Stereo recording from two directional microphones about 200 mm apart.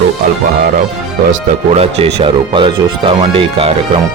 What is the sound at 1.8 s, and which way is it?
Speech, 30° right (ahead or behind).